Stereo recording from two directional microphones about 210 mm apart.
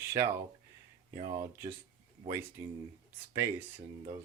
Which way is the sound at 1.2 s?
20° right (ahead or behind).